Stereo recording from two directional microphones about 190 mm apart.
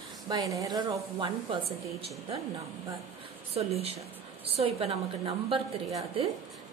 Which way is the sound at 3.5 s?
30° right (ahead or behind).